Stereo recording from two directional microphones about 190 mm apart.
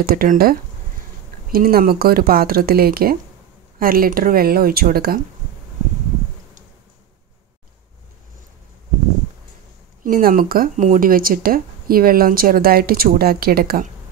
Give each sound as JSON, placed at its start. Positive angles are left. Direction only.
{"t": 0.0, "sound": "speech", "side_deg": -50}
{"t": 10.0, "sound": "speech", "side_deg": -45}